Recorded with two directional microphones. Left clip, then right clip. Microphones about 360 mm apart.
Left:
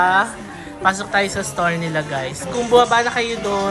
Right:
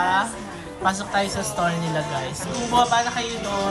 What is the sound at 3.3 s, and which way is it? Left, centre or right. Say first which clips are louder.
Speech: left 5 dB; right.